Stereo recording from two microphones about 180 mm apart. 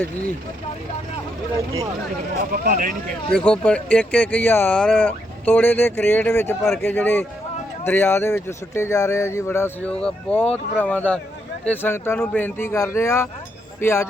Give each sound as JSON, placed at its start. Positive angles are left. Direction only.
{"t": 2.5, "sound": "speech", "side_deg": -50}
{"t": 3.3, "sound": "speech", "side_deg": 5}